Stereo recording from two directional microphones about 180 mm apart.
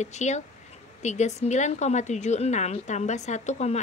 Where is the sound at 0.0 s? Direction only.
40° left (ahead or behind).